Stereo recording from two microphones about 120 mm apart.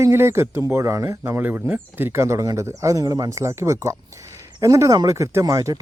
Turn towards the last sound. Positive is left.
turn(degrees=-30)  # may be behind; listen again after turning